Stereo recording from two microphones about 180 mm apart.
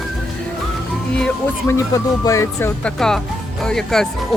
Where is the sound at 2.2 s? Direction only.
15° left (ahead or behind).